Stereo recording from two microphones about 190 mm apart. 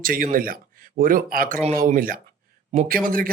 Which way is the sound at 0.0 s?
50° right (ahead or behind).